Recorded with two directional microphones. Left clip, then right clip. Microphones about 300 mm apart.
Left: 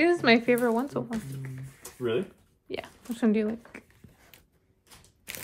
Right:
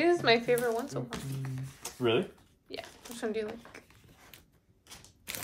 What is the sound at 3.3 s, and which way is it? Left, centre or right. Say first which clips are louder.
Speech: left 6 dB; left.